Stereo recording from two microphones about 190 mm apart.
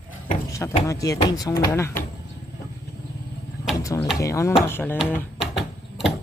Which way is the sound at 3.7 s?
15° left (ahead or behind).